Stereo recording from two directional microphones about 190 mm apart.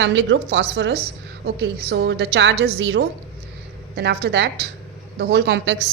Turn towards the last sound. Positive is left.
turn(degrees=-65)  # may be behind; listen again after turning